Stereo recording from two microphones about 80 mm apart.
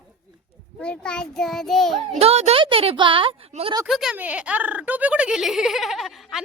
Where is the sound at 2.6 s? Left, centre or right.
Right.